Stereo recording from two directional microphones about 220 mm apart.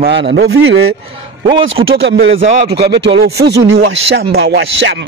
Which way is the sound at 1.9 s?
50° right (ahead or behind).